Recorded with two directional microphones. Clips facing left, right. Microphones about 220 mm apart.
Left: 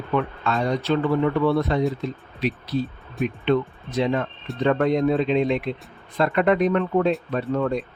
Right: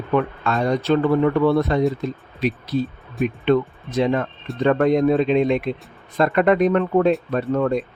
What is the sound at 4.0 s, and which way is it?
Speech, 50° right (ahead or behind).